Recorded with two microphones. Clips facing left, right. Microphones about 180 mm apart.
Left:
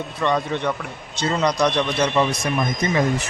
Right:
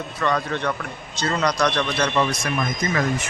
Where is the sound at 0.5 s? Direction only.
Centre (ahead or behind).